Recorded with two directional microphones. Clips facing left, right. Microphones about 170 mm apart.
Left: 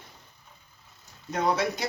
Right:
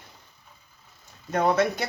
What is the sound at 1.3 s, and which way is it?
Speech, 55° right (ahead or behind).